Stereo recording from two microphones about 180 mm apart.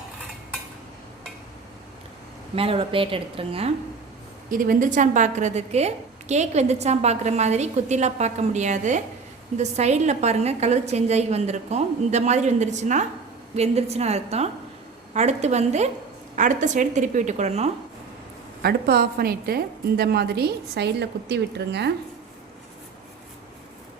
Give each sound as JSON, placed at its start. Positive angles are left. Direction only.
{"t": 2.6, "sound": "a woman's voice", "side_deg": -30}
{"t": 4.5, "sound": "a woman's voice", "side_deg": -50}
{"t": 18.6, "sound": "a woman's voice", "side_deg": -60}